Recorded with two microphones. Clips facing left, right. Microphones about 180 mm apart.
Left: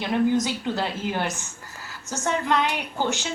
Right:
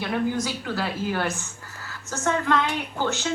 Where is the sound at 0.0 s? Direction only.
20° left (ahead or behind).